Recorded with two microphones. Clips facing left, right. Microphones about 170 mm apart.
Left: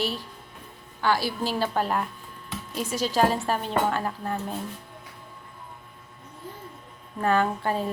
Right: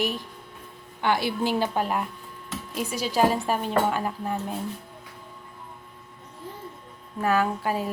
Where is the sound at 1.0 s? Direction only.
20° right (ahead or behind).